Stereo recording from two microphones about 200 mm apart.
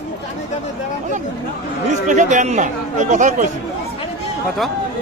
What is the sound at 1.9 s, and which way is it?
Speech, 40° right (ahead or behind).